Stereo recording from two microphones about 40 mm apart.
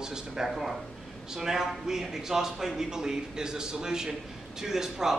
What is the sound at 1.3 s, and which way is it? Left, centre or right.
A man's voice, centre.